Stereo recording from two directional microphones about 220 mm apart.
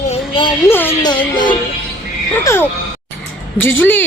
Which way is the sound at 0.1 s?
25° left (ahead or behind).